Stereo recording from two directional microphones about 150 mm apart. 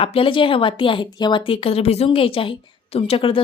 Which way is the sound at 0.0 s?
40° left (ahead or behind).